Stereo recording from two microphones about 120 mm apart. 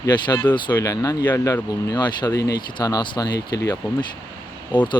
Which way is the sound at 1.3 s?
20° left (ahead or behind).